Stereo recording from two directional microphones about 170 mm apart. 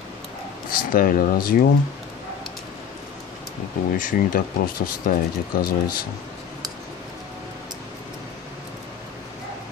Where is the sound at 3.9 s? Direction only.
55° left (ahead or behind).